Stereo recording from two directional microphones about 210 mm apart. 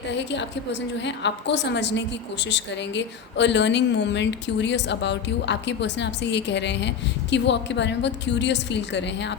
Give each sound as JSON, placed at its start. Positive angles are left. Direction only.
{"t": 0.1, "sound": "a woman's voice", "side_deg": 55}